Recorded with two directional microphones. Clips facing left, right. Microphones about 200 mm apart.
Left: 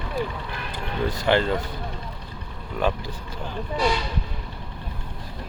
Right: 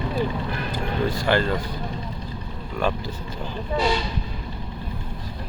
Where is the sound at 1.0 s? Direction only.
20° left (ahead or behind).